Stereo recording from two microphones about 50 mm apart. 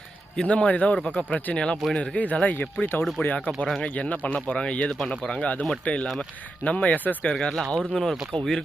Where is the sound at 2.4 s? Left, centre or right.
Left.